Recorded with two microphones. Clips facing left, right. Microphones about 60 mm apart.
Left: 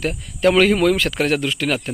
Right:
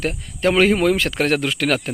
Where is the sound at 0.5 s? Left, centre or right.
Right.